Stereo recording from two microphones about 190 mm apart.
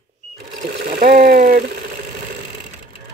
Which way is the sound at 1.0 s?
60° right (ahead or behind).